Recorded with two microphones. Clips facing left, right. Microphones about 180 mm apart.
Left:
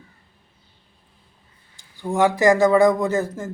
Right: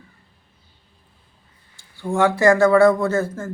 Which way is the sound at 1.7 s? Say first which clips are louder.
Right 1 dB; 15° left (ahead or behind).